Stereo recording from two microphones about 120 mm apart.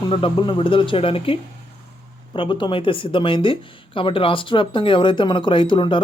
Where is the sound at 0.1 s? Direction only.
45° left (ahead or behind).